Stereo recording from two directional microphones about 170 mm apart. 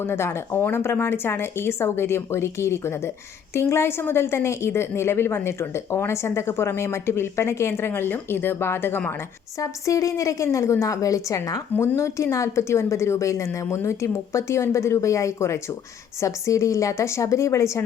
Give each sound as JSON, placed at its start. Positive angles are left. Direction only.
{"t": 0.0, "sound": "a woman's voice", "side_deg": 15}